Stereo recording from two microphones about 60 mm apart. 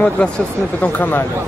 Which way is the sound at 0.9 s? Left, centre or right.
Left.